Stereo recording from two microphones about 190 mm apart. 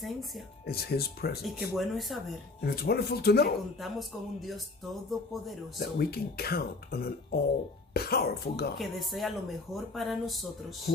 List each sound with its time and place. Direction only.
0.7 s speech: 55° left (ahead or behind)
1.4 s speech: centre (ahead or behind)
2.6 s speech: 55° left (ahead or behind)
3.8 s speech: centre (ahead or behind)
5.8 s speech: 55° left (ahead or behind)
8.7 s speech: centre (ahead or behind)